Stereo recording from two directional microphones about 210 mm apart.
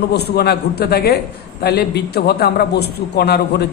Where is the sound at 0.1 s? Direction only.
50° left (ahead or behind).